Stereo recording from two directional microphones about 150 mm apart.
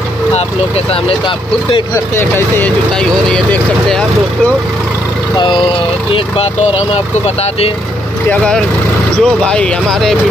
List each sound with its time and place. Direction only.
2.1 s speech: 15° left (ahead or behind)
6.1 s speech: 35° left (ahead or behind)
9.2 s speech: 5° left (ahead or behind)